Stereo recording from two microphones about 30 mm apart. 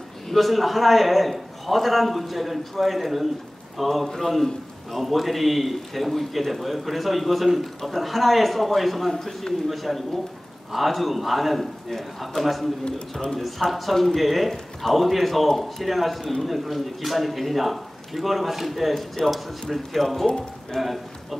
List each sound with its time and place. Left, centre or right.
0.3 s a man's voice: centre
4.1 s speech: centre
4.9 s a man's voice: centre
9.1 s speech: centre
9.7 s a man's voice: centre
12.8 s a man's voice: centre
13.4 s a man's voice: centre